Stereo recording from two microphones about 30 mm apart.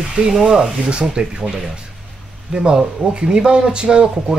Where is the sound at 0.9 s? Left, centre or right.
Right.